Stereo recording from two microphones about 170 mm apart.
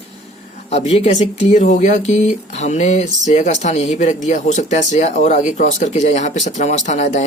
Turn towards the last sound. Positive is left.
turn(degrees=40)  # may be behind; listen again after turning